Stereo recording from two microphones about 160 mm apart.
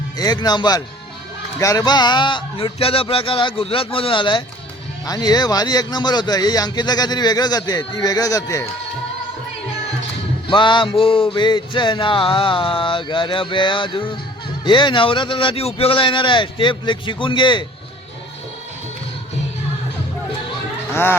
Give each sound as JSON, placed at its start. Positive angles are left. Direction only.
{"t": 0.2, "sound": "speech", "side_deg": 25}
{"t": 1.5, "sound": "music", "side_deg": 20}
{"t": 5.0, "sound": "speech", "side_deg": 25}
{"t": 10.5, "sound": "music", "side_deg": 30}
{"t": 20.9, "sound": "speech", "side_deg": 15}